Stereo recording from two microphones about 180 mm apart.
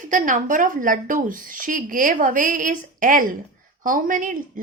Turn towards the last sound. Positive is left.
turn(degrees=-50)  # may be behind; listen again after turning